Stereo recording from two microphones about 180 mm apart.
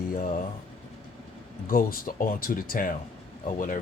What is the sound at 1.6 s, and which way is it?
Speech, 50° left (ahead or behind).